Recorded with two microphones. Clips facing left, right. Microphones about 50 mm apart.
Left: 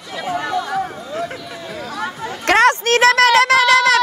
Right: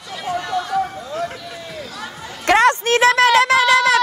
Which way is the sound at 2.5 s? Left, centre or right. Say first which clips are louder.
Left 1 dB; left.